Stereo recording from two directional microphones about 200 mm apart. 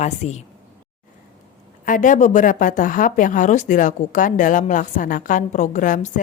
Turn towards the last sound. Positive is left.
turn(degrees=40)  # may be behind; listen again after turning